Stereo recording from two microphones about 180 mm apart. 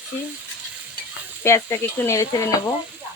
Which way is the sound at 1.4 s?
15° left (ahead or behind).